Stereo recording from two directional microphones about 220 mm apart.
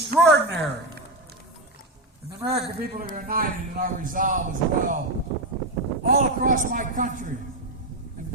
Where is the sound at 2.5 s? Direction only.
45° right (ahead or behind).